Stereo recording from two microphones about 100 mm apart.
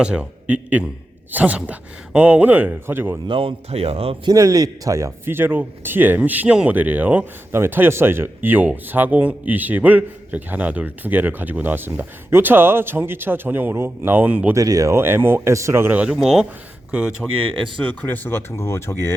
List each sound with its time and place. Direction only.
0.0 s speech: 10° right (ahead or behind)
3.2 s speech: 60° right (ahead or behind)
4.3 s speech: 35° right (ahead or behind); by 14.5 s 15° right (ahead or behind)
14.5 s speech: 35° right (ahead or behind)
16.0 s speech: 5° right (ahead or behind)
18.0 s speech: 20° left (ahead or behind)